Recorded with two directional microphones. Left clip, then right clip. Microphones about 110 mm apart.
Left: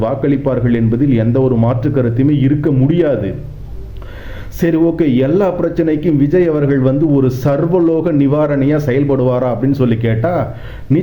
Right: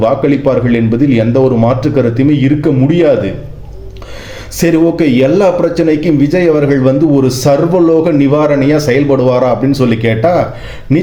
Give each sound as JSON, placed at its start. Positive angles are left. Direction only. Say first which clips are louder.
{"t": 0.0, "sound": "a man's voice", "louder": "right 5 dB", "side_deg": -25}
{"t": 4.5, "sound": "a man's voice", "louder": "right 3 dB", "side_deg": -25}